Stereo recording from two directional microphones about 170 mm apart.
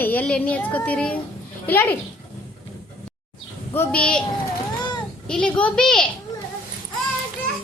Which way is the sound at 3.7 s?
10° left (ahead or behind).